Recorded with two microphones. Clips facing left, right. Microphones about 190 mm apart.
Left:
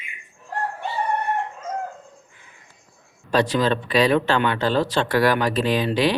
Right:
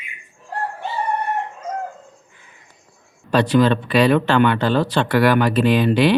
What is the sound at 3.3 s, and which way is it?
Speech, 60° right (ahead or behind).